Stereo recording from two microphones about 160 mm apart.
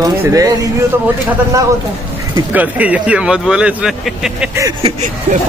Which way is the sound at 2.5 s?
10° right (ahead or behind).